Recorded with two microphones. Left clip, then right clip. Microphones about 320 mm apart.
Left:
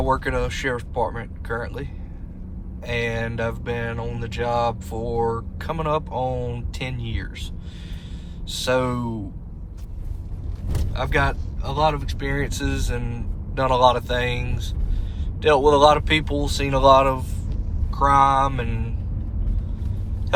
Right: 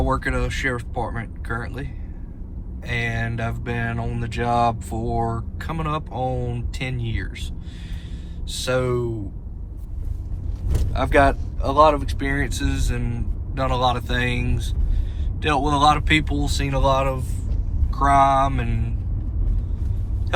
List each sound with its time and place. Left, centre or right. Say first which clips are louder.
0.0 s speech: left 1 dB; centre
8.4 s speech: left 1 dB; centre
10.9 s speech: right 5 dB; centre